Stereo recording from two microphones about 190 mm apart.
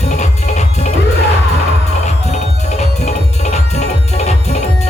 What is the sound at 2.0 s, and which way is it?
Music, 35° left (ahead or behind).